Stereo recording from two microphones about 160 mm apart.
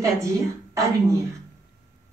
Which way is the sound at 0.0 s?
20° right (ahead or behind).